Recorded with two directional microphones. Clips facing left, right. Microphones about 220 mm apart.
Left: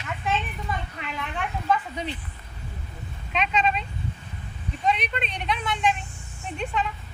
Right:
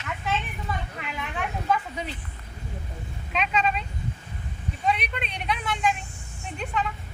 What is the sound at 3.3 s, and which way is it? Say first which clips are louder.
Speech: left 1 dB; 5° right (ahead or behind).